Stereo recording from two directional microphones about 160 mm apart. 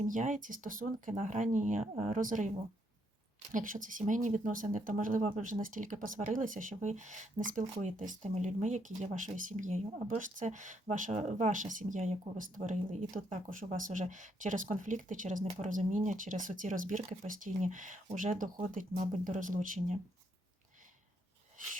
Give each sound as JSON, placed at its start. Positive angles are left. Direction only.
{"t": 0.0, "sound": "speech", "side_deg": -55}
{"t": 3.5, "sound": "speech", "side_deg": -55}